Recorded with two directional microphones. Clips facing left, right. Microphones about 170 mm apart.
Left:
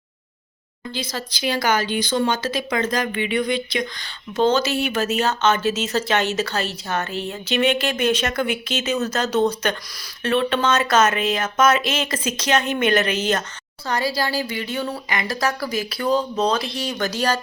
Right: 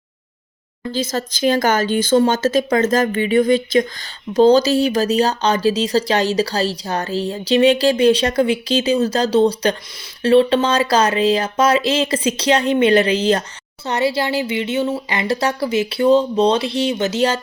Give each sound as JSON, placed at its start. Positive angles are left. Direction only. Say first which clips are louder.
{"t": 0.9, "sound": "speech", "louder": "right 8 dB", "side_deg": -45}